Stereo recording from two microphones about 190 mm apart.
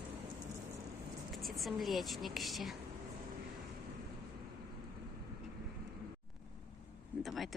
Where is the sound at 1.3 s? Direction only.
Centre (ahead or behind).